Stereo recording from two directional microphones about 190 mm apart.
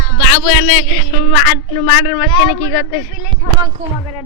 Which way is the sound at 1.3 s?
30° left (ahead or behind).